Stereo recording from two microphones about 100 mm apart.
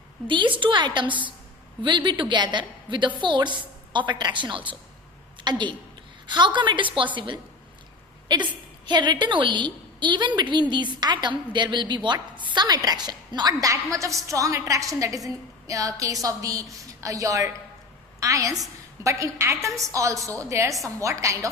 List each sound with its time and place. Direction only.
0.3 s a woman's voice: 55° right (ahead or behind)
8.9 s a woman's voice: 50° right (ahead or behind); by 21.5 s 30° right (ahead or behind)